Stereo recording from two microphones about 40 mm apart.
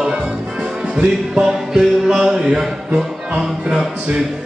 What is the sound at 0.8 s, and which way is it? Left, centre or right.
Music, right.